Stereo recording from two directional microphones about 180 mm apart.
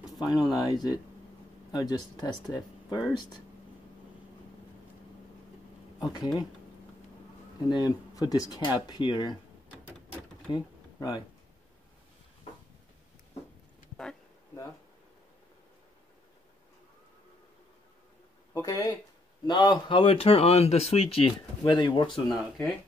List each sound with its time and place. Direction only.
0.2 s speech: 25° left (ahead or behind)
6.1 s speech: 20° left (ahead or behind)
7.7 s speech: 20° left (ahead or behind)
10.5 s speech: 25° left (ahead or behind)
18.5 s speech: 20° left (ahead or behind)